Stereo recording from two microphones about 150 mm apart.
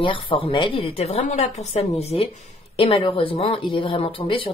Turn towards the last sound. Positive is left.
turn(degrees=35)  # may be behind; listen again after turning